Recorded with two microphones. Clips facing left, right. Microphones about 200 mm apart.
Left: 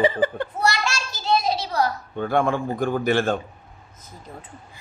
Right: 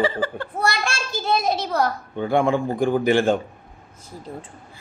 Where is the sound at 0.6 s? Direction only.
55° right (ahead or behind).